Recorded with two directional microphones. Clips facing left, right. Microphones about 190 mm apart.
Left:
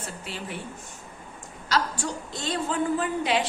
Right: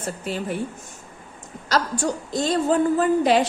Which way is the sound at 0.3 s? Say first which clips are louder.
Right 11 dB; 40° right (ahead or behind).